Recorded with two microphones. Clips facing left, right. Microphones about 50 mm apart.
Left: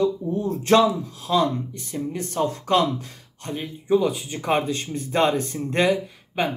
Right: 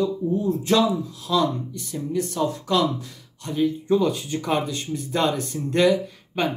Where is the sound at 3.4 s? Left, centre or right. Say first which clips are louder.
Right 8 dB; left.